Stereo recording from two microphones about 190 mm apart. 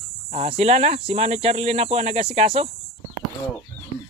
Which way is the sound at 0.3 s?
35° right (ahead or behind).